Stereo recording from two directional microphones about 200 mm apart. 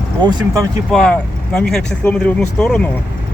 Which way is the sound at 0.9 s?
5° left (ahead or behind).